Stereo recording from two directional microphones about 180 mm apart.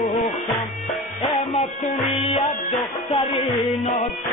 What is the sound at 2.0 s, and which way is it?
Music, 30° left (ahead or behind).